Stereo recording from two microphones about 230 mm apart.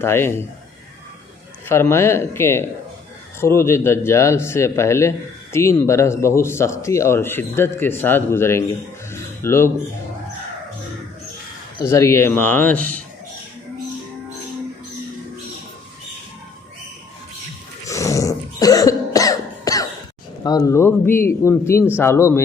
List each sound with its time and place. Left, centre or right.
0.0 s speech: centre
1.6 s speech: centre
11.8 s speech: centre
17.8 s cough: centre
20.4 s speech: centre